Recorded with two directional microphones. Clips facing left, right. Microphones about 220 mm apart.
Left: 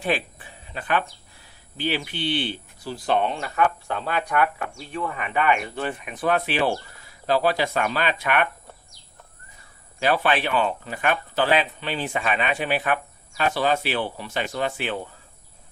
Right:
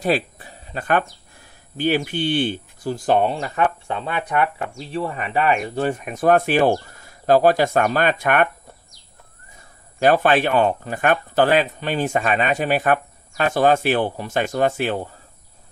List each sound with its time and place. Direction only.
0.0 s speech: 40° right (ahead or behind)
10.0 s speech: 45° right (ahead or behind)